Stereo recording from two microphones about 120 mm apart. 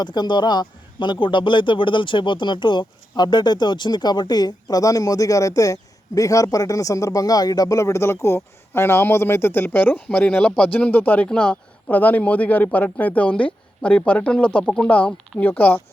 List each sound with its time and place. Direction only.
0.0 s a man's voice: 35° left (ahead or behind); by 15.8 s 15° left (ahead or behind)